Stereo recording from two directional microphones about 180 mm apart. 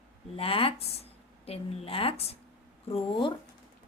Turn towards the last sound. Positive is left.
turn(degrees=30)  # may be behind; listen again after turning